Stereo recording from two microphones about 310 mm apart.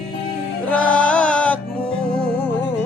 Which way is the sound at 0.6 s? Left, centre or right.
Centre.